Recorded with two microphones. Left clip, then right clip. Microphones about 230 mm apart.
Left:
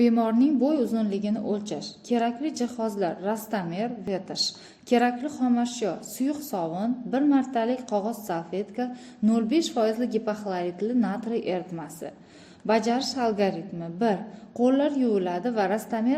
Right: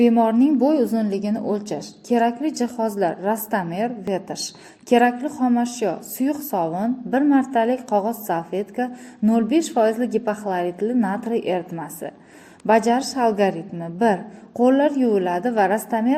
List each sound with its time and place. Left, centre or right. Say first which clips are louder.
0.0 s a woman's voice: right 6 dB; centre